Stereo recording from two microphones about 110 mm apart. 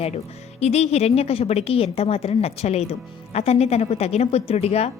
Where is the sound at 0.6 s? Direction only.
75° left (ahead or behind).